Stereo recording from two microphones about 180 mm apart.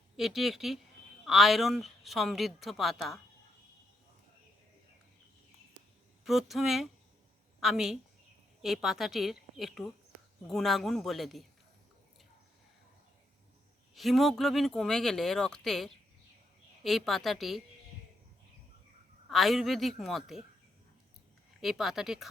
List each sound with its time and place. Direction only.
0.2 s speech: centre (ahead or behind)
6.2 s speech: centre (ahead or behind)
13.9 s speech: centre (ahead or behind)
19.3 s speech: centre (ahead or behind)
21.6 s speech: centre (ahead or behind)